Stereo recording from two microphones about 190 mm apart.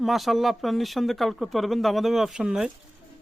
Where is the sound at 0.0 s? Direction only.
Centre (ahead or behind).